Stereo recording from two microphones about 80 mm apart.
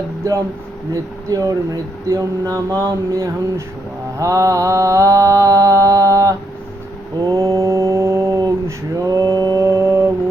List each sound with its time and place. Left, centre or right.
0.2 s speech: right
4.2 s mantra: right